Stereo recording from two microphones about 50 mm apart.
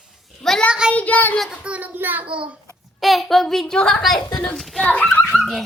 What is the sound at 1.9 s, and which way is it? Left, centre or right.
Child singing, right.